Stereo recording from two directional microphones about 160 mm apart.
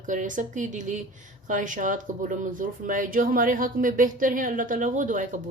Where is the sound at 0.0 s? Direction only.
55° right (ahead or behind).